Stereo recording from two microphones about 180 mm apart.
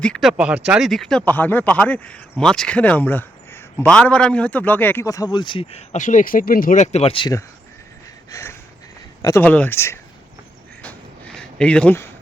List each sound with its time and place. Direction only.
0.0 s a man's voice: centre (ahead or behind); by 7.3 s 30° left (ahead or behind)
8.3 s a sound: 15° left (ahead or behind)
9.2 s a man's voice: 10° left (ahead or behind)
11.3 s speech: 5° left (ahead or behind)